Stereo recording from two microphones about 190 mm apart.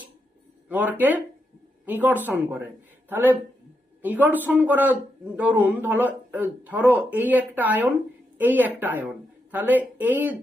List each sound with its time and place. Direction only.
0.7 s speech: 10° right (ahead or behind)